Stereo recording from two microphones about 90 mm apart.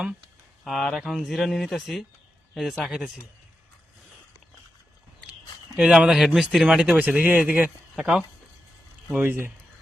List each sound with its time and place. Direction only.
0.6 s speech: centre (ahead or behind)
5.7 s a man's voice: 10° right (ahead or behind)
7.9 s a man's voice: 5° right (ahead or behind)
9.1 s speech: 25° right (ahead or behind)